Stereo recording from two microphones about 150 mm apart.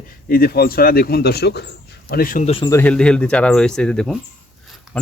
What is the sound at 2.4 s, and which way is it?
Speech, 40° left (ahead or behind).